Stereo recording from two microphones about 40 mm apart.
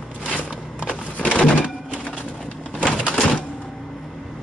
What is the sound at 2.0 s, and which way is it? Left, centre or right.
Bird, left.